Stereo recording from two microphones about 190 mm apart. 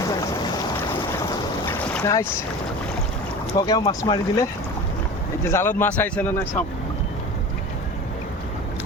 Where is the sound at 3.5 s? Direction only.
20° left (ahead or behind).